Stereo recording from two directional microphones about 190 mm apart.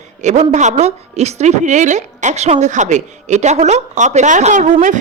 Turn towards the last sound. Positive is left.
turn(degrees=-40)  # may be behind; listen again after turning